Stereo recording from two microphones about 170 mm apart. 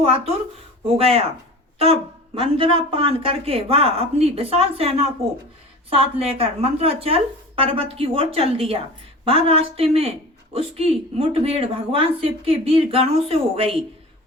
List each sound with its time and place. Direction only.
0.0 s speech: 35° right (ahead or behind)